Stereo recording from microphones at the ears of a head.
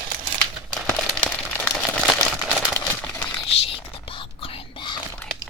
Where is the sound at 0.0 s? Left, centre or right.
Right.